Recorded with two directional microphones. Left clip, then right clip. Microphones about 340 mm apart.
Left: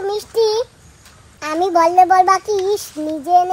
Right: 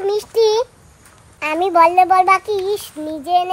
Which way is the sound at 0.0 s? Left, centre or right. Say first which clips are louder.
Right 2 dB; centre.